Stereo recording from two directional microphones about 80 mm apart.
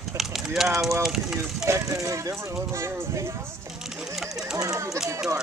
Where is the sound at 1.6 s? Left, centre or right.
Right.